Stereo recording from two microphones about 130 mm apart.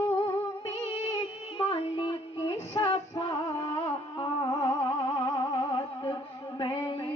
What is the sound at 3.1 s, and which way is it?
Music, 30° left (ahead or behind).